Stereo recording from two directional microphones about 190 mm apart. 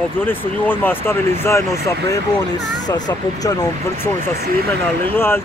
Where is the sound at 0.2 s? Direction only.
10° left (ahead or behind).